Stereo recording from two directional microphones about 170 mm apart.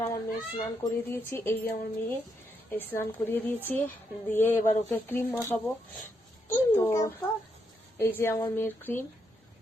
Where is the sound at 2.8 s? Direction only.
10° left (ahead or behind).